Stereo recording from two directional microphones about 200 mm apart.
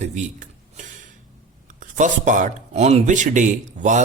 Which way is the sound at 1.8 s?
40° right (ahead or behind).